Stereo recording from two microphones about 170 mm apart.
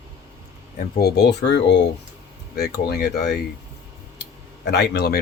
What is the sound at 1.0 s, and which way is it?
Speech, 70° left (ahead or behind).